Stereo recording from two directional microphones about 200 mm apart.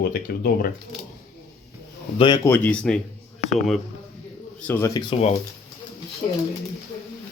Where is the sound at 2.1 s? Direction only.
20° left (ahead or behind); by 3.0 s 5° left (ahead or behind).